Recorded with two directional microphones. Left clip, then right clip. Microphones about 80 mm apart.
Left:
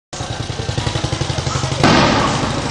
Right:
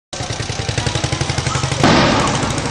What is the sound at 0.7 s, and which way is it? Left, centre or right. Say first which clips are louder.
Vehicle: right 1 dB; right.